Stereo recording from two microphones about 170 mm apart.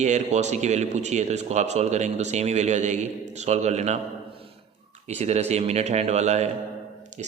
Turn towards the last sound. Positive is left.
turn(degrees=-45)  # may be behind; listen again after turning